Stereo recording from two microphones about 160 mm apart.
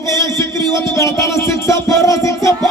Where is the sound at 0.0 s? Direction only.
20° left (ahead or behind).